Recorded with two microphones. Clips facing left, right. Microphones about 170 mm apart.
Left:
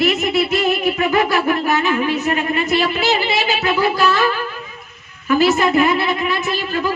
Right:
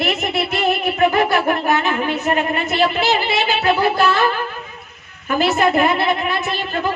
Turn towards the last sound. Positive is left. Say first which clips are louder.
# left 1 dB
turn(degrees=-55)  # may be behind; listen again after turning